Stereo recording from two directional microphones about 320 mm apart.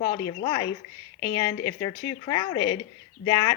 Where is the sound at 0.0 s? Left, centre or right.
Centre.